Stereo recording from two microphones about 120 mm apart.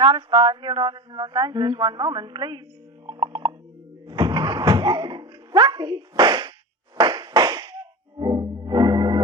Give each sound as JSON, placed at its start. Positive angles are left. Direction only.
{"t": 0.0, "sound": "speech", "side_deg": -40}
{"t": 3.1, "sound": "a sound", "side_deg": -35}
{"t": 6.9, "sound": "music", "side_deg": -35}